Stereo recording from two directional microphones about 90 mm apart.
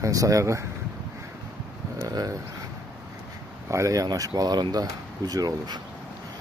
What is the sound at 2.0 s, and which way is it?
Speech, 45° right (ahead or behind).